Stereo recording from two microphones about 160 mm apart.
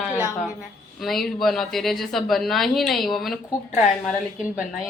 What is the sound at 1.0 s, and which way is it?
A woman's voice, centre (ahead or behind).